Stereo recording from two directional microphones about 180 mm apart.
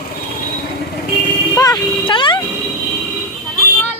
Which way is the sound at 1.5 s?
20° left (ahead or behind).